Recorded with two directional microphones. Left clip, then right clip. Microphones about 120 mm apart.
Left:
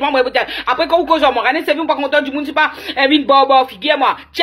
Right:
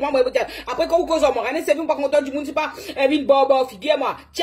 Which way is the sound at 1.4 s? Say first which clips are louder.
Left 8 dB; 30° right (ahead or behind).